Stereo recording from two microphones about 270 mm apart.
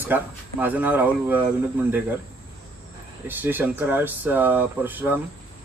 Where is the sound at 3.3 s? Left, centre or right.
Centre.